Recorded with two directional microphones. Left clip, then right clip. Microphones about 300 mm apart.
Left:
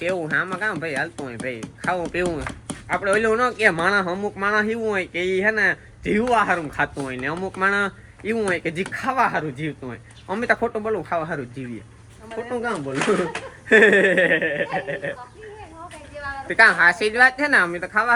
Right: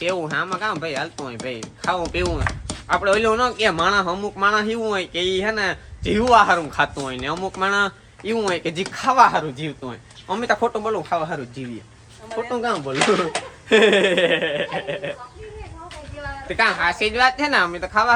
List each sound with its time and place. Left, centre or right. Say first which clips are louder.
0.0 s speech: even; centre
12.4 s speech: right 3 dB; centre
13.7 s speech: left 1 dB; centre
16.5 s speech: left 5 dB; centre